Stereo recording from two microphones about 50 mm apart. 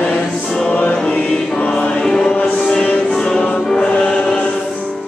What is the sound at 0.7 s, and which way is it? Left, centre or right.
Choir, left.